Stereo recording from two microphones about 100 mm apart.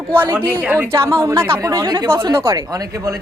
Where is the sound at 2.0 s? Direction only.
25° right (ahead or behind).